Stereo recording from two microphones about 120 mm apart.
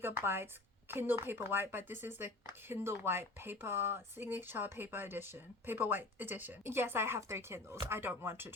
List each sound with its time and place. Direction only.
0.0 s speech: 20° right (ahead or behind)